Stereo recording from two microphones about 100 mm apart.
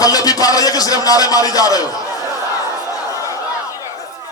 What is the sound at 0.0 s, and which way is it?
A man's voice, 40° left (ahead or behind).